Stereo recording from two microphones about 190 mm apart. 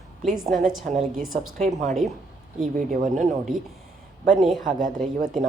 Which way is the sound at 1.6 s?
35° right (ahead or behind).